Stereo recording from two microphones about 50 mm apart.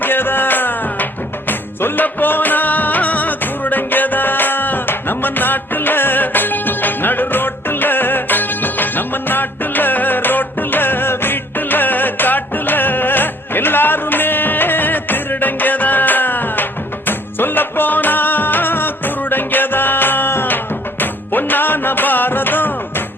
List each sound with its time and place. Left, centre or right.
0.0 s music: left